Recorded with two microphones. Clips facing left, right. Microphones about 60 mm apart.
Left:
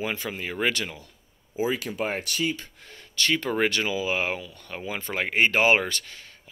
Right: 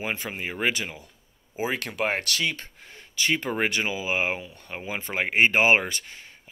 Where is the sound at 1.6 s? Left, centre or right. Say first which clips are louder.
Left 1 dB; right.